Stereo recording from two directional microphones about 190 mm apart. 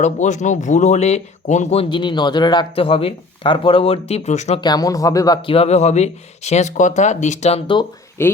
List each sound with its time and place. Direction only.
0.0 s speech: 40° left (ahead or behind)
4.6 s speech: 20° left (ahead or behind)
8.2 s speech: 10° left (ahead or behind)